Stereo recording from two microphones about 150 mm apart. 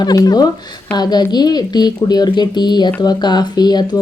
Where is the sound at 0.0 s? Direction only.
25° left (ahead or behind).